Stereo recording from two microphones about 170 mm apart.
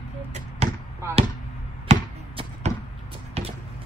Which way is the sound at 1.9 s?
40° right (ahead or behind).